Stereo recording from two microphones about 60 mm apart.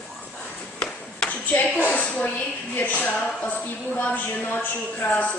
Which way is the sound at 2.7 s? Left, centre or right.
Left.